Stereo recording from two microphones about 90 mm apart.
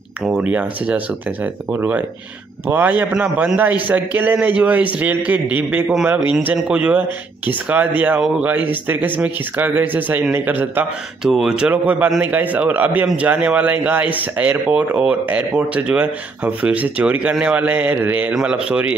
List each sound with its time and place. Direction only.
0.4 s speech: 15° right (ahead or behind)
11.2 s speech: 10° right (ahead or behind)